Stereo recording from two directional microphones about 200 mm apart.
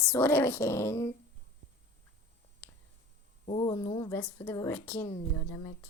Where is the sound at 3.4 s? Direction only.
25° left (ahead or behind).